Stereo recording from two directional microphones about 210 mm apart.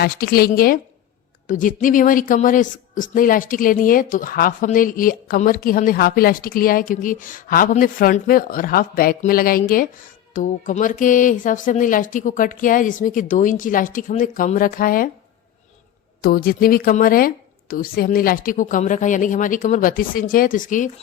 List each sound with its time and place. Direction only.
0.0 s a woman's voice: 45° left (ahead or behind)
16.2 s a woman's voice: 45° left (ahead or behind)